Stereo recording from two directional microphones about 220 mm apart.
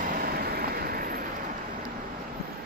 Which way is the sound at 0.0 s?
40° right (ahead or behind).